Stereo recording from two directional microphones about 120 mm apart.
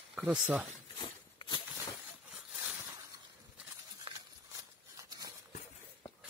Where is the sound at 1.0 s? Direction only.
40° left (ahead or behind).